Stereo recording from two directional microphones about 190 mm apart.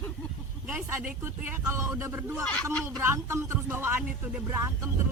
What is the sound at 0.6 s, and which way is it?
Speech, 10° right (ahead or behind).